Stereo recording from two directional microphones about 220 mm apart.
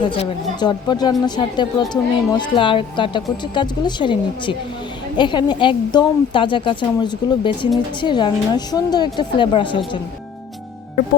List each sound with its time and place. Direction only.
0.1 s speech: 20° left (ahead or behind)